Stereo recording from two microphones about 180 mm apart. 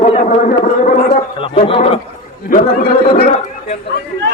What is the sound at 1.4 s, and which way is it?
Speech, 30° left (ahead or behind).